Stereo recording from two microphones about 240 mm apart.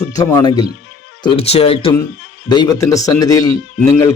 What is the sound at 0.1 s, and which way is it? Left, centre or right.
Speech, centre.